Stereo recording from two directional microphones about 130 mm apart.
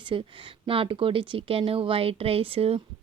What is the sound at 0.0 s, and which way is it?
Speech, 40° right (ahead or behind).